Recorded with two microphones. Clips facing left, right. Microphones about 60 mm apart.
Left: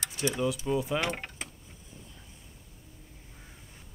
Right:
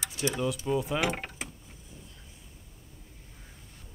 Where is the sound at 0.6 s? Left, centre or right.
Centre.